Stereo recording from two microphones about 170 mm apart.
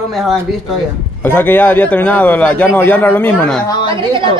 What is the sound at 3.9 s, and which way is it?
Speech, 30° right (ahead or behind).